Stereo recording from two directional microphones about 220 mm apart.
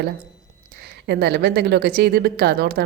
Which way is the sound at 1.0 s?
50° right (ahead or behind).